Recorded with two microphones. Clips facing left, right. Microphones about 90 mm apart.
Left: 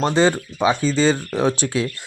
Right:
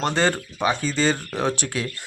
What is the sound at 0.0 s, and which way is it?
Speech, 15° left (ahead or behind).